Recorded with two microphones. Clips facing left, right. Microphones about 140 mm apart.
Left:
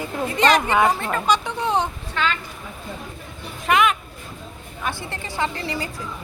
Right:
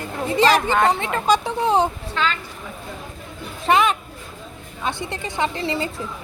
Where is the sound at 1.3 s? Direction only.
35° right (ahead or behind).